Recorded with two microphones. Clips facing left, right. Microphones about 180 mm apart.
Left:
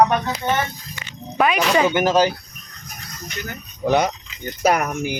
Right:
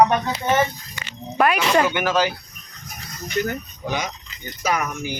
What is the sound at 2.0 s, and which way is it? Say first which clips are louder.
Speech: left 4 dB; 40° left (ahead or behind).